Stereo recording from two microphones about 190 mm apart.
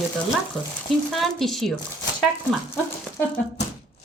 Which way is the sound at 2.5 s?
10° left (ahead or behind).